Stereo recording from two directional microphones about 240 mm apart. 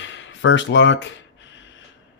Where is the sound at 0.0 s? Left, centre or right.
Left.